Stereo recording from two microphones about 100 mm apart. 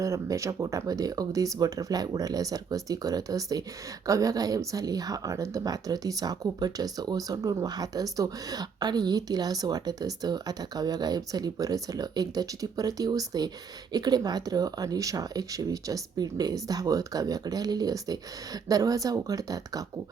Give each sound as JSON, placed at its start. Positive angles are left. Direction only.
{"t": 0.0, "sound": "speech", "side_deg": -35}